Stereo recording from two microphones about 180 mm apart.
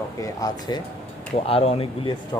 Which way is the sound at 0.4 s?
20° left (ahead or behind).